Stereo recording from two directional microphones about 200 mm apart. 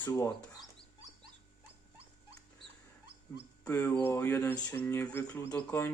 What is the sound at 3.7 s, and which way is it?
Speech, 10° left (ahead or behind).